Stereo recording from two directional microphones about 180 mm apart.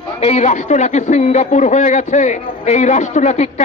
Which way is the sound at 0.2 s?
40° left (ahead or behind).